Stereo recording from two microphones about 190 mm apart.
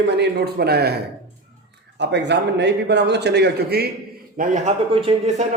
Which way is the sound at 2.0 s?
65° right (ahead or behind).